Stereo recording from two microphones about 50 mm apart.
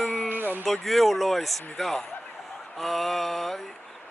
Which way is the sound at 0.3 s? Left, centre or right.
Right.